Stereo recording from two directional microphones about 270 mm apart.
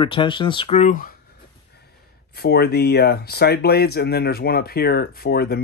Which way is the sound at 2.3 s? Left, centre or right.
Left.